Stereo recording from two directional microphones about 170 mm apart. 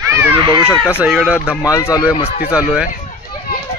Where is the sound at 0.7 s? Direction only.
10° left (ahead or behind).